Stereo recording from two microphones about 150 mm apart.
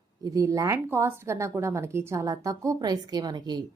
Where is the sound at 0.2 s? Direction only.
20° right (ahead or behind).